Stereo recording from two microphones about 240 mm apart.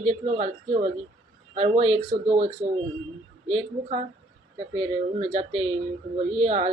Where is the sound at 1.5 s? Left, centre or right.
Right.